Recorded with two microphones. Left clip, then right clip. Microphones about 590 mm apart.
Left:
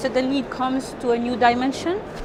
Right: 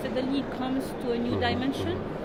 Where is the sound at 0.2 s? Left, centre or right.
Left.